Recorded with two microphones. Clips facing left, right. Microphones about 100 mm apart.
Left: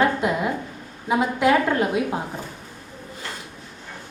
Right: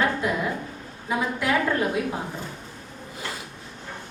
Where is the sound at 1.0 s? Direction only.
20° left (ahead or behind).